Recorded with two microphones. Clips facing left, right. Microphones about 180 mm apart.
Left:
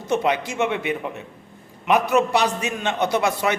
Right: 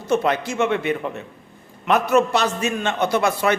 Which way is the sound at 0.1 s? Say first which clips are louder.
Right 2 dB; 15° left (ahead or behind).